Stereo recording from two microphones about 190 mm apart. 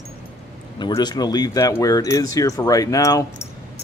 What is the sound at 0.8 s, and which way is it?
Speech, 25° left (ahead or behind).